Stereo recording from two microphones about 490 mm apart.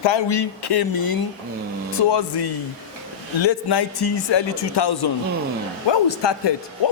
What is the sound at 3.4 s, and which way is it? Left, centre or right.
A man's voice, left.